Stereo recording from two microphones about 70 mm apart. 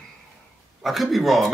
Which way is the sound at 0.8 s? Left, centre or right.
Centre.